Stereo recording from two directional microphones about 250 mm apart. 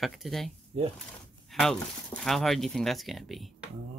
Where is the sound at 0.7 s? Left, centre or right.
Right.